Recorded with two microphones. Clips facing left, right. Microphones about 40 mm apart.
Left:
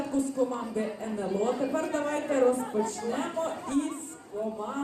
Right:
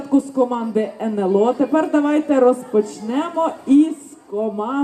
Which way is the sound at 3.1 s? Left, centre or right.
Right.